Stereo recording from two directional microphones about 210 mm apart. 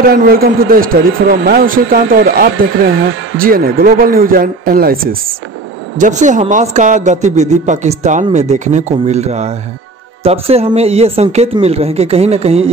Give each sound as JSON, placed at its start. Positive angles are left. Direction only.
{"t": 0.1, "sound": "a woman's voice", "side_deg": -45}